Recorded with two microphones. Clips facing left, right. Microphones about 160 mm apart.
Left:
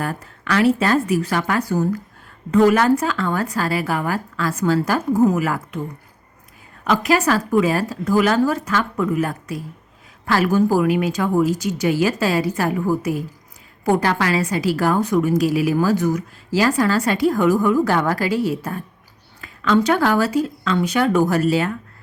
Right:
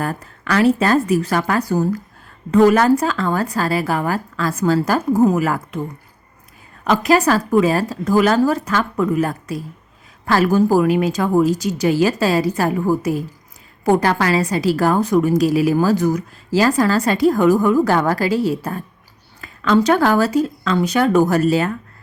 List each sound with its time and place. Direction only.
0.0 s a woman's voice: 40° right (ahead or behind)
6.8 s a woman's voice: 40° right (ahead or behind)